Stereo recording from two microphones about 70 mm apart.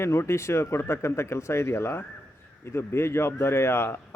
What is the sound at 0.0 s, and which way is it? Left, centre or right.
Speech, left.